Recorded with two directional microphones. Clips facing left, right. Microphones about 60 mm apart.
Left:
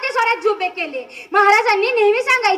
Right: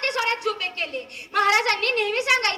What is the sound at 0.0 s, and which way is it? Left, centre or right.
A woman's voice, left.